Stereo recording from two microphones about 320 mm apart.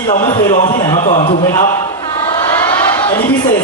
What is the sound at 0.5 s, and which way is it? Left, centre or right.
Speech, left.